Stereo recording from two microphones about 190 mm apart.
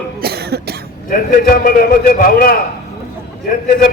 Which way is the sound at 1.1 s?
50° left (ahead or behind).